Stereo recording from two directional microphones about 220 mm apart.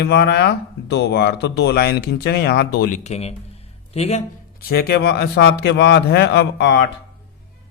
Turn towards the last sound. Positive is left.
turn(degrees=50)  # may be behind; listen again after turning